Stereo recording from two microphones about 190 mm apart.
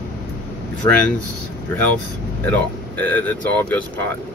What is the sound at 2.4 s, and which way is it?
Speech, 10° left (ahead or behind).